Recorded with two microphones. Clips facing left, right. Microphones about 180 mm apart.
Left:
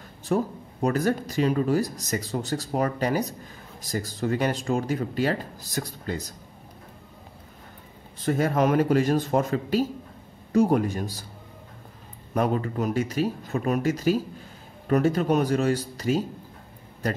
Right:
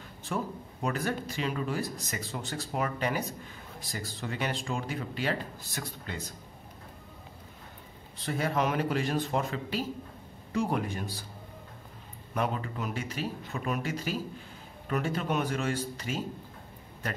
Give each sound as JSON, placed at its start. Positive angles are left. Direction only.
{"t": 0.3, "sound": "speech", "side_deg": 40}
{"t": 8.2, "sound": "speech", "side_deg": 45}
{"t": 12.4, "sound": "speech", "side_deg": 40}